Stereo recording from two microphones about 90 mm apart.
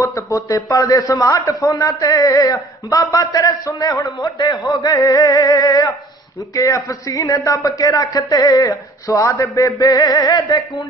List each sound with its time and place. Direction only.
0.0 s a man's voice: 35° left (ahead or behind)
4.4 s male singing: 45° left (ahead or behind)
6.5 s a man's voice: 40° left (ahead or behind)